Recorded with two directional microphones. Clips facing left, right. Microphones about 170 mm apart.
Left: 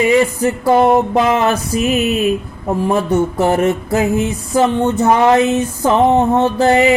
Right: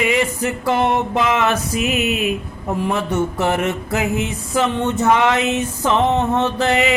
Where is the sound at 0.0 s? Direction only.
35° left (ahead or behind).